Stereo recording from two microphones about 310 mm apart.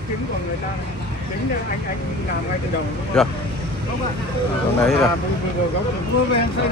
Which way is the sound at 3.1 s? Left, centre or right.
Centre.